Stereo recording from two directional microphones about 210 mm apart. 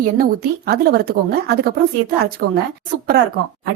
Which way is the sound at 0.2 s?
50° right (ahead or behind).